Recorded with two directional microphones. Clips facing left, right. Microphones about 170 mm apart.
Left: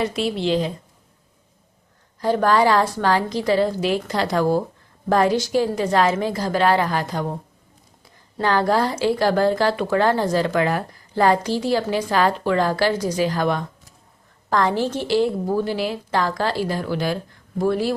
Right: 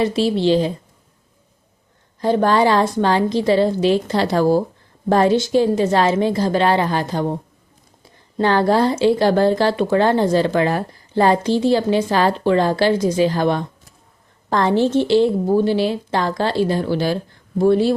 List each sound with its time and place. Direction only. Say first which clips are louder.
0.0 s a woman's voice: right 5 dB; 30° right (ahead or behind)
2.2 s speech: right 2 dB; 25° right (ahead or behind)
8.4 s speech: right 4 dB; 25° right (ahead or behind)